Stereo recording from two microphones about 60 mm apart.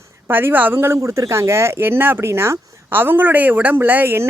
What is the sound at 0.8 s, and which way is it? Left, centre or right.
Speech, right.